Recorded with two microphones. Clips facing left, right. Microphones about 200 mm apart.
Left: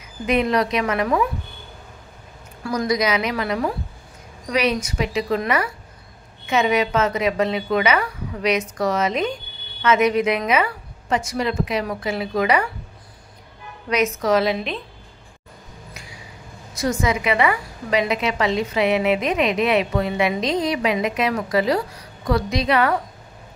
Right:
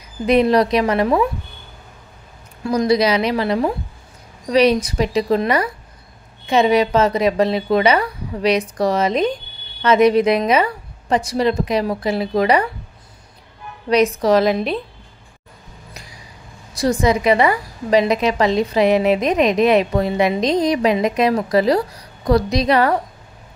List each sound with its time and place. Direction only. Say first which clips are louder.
0.3 s a woman's voice: right 5 dB; 35° right (ahead or behind)
2.6 s a woman's voice: right 5 dB; 25° right (ahead or behind)
13.8 s a woman's voice: right 5 dB; 35° right (ahead or behind)
16.7 s a woman's voice: right 5 dB; 35° right (ahead or behind)